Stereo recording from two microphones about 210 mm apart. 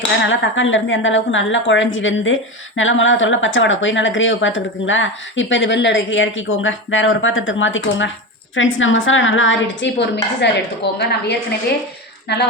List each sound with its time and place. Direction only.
0.3 s a woman's voice: 65° left (ahead or behind)